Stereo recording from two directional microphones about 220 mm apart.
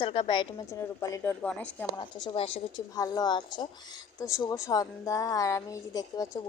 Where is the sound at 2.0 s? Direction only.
20° left (ahead or behind).